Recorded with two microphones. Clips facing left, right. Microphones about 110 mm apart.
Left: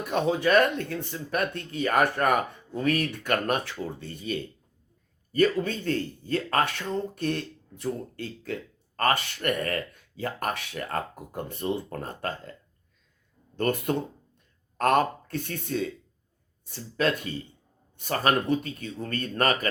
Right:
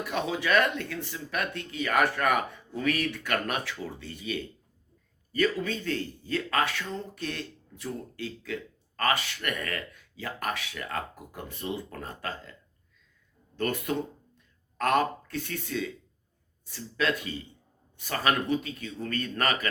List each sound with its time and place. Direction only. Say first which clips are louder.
0.0 s speech: left 5 dB; 40° left (ahead or behind)
13.6 s speech: left 3 dB; 40° left (ahead or behind)